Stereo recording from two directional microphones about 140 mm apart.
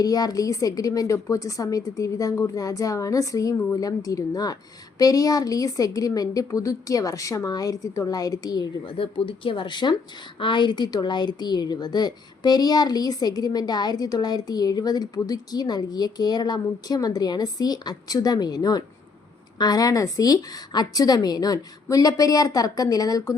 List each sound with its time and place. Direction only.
0.0 s a woman's voice: 25° left (ahead or behind)